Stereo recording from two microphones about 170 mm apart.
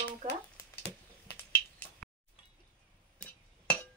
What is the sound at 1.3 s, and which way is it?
Finger snapping, 10° left (ahead or behind).